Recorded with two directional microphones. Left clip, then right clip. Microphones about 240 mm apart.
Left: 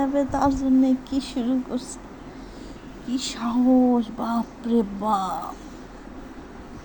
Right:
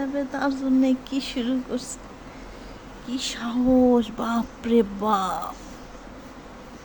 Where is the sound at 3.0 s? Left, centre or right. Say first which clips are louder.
Left 2 dB; centre.